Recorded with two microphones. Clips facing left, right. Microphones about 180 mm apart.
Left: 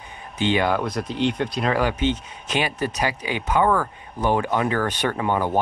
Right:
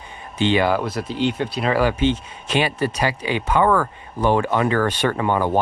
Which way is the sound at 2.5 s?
30° right (ahead or behind).